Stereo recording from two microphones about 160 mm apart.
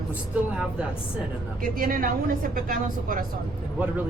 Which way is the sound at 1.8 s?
65° right (ahead or behind).